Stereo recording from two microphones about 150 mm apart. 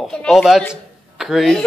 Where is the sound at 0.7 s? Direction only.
Centre (ahead or behind).